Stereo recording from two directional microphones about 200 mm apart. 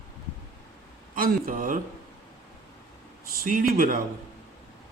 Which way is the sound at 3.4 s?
45° right (ahead or behind).